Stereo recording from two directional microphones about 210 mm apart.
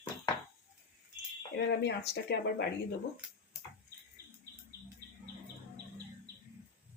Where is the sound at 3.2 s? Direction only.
5° right (ahead or behind).